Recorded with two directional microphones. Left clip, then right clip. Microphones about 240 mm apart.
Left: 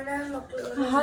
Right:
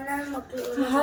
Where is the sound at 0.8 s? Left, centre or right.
Centre.